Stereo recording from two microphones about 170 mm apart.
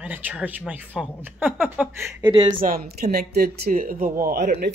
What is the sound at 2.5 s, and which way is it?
Speech, 55° right (ahead or behind).